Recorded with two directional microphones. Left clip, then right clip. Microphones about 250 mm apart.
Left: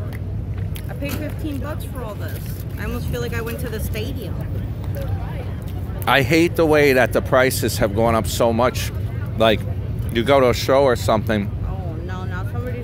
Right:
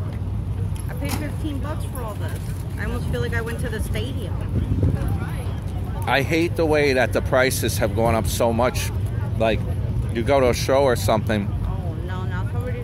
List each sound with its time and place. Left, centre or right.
2.8 s speech: left
6.0 s speech: left